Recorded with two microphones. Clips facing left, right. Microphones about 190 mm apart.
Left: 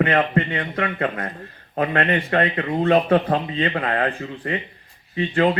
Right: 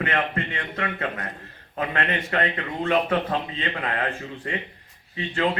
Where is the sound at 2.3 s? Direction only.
35° left (ahead or behind).